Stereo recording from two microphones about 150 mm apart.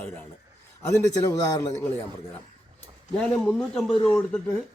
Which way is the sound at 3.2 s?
5° left (ahead or behind).